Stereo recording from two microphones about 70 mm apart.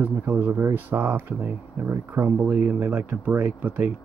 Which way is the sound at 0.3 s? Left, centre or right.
Right.